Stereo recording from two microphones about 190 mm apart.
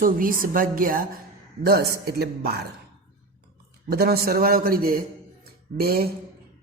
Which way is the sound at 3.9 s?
55° right (ahead or behind).